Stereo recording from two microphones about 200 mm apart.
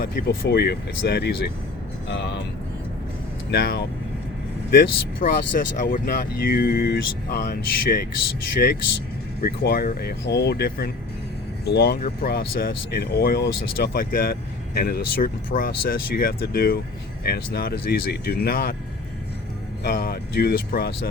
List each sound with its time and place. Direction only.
0.0 s speech: 45° left (ahead or behind)
3.5 s speech: 55° left (ahead or behind)
19.8 s speech: 50° left (ahead or behind)